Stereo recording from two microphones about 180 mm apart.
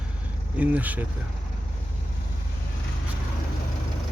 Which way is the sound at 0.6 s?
10° right (ahead or behind).